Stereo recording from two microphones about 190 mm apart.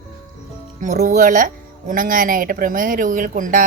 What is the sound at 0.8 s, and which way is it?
Speech, 40° right (ahead or behind).